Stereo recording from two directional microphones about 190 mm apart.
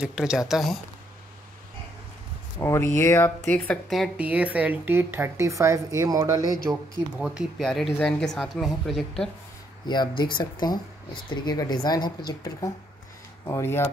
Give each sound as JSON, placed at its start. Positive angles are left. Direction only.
{"t": 0.0, "sound": "speech", "side_deg": -5}
{"t": 2.6, "sound": "speech", "side_deg": 15}
{"t": 6.7, "sound": "speech", "side_deg": 0}
{"t": 9.8, "sound": "speech", "side_deg": 25}